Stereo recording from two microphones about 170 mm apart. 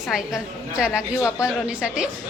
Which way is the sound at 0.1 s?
5° right (ahead or behind).